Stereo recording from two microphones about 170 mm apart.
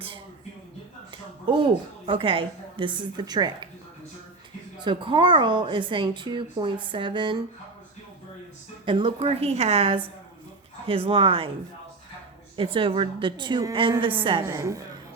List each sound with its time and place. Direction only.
1.5 s speech: 30° right (ahead or behind)
4.8 s speech: 30° right (ahead or behind)
8.8 s a woman's voice: 30° right (ahead or behind)
12.5 s speech: 30° right (ahead or behind)
14.4 s a woman's voice: 20° right (ahead or behind)